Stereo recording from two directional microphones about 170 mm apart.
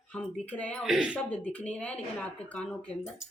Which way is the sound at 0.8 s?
5° right (ahead or behind).